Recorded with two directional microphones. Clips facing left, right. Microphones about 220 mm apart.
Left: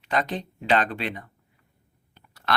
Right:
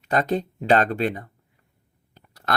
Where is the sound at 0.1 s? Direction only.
45° right (ahead or behind).